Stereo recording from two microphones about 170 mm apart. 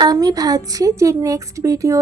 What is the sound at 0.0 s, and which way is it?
Speech, 25° right (ahead or behind).